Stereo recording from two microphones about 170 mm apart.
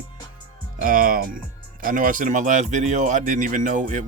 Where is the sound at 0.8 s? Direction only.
55° right (ahead or behind).